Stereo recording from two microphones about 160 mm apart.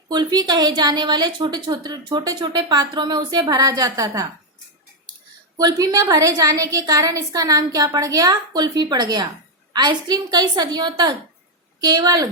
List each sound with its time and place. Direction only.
0.1 s a woman's voice: 25° right (ahead or behind)
5.5 s a woman's voice: 25° right (ahead or behind)